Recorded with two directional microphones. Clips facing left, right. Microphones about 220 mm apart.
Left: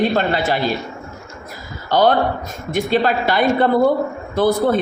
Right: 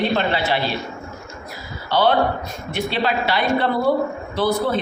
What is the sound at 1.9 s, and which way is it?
A man's voice, 45° left (ahead or behind).